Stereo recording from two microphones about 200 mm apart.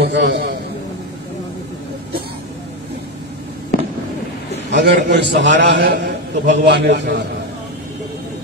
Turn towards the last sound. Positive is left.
turn(degrees=-60)  # may be behind; listen again after turning